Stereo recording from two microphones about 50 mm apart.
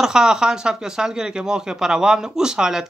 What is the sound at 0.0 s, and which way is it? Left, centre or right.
Speech, centre.